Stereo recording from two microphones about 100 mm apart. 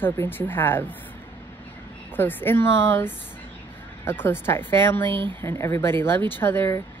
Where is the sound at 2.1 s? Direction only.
20° left (ahead or behind).